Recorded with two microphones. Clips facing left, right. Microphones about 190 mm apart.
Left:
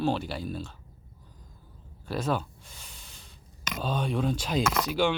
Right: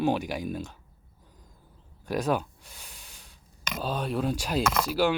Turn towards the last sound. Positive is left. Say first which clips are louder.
# right 1 dB
turn(degrees=-5)  # may be behind; listen again after turning